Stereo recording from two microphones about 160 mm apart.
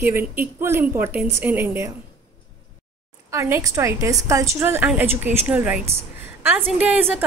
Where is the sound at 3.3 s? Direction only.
20° right (ahead or behind).